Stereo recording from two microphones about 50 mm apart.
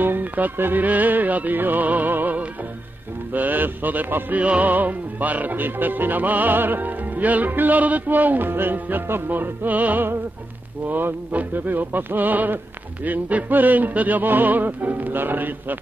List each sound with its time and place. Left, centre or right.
0.0 s music: right